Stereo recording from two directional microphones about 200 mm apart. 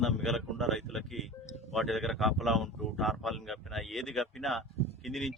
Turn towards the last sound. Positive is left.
turn(degrees=0)  # may be behind; listen again after turning